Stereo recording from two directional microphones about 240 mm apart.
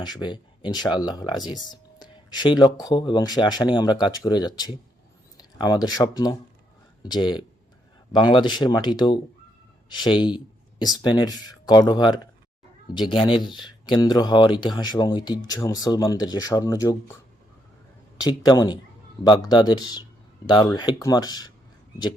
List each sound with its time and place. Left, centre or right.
0.0 s speech: centre
18.2 s speech: centre